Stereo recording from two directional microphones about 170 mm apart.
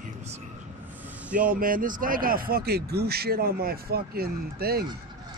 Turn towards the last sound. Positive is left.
turn(degrees=-65)  # may be behind; listen again after turning